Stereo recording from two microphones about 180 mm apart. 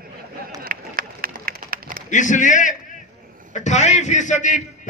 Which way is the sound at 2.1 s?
45° left (ahead or behind).